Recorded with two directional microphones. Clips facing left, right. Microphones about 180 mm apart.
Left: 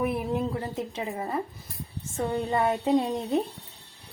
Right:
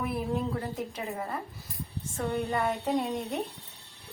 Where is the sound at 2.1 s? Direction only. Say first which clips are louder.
Left 3 dB; 25° left (ahead or behind).